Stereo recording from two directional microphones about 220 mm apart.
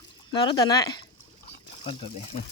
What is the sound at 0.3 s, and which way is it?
Speech, 20° left (ahead or behind).